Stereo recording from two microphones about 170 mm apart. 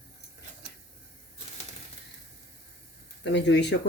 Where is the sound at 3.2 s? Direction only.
90° left.